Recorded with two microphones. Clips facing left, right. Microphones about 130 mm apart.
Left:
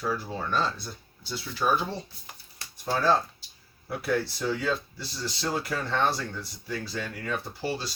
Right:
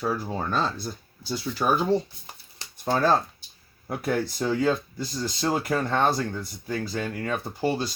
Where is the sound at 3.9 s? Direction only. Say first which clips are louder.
Right 2 dB; 45° right (ahead or behind).